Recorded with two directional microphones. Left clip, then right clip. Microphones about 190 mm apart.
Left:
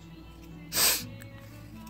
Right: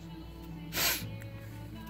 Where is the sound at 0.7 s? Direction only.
20° left (ahead or behind).